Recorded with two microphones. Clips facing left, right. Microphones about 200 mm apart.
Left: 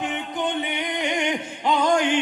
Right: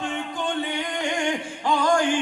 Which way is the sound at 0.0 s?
20° left (ahead or behind).